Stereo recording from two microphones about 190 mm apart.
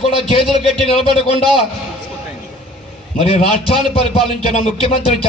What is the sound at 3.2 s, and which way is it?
A man's voice, 30° left (ahead or behind).